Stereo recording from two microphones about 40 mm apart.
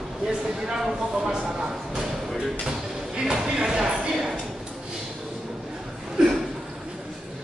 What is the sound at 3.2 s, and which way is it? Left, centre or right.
Speech, centre.